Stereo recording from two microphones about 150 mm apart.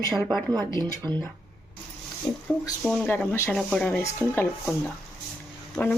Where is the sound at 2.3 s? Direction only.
20° left (ahead or behind).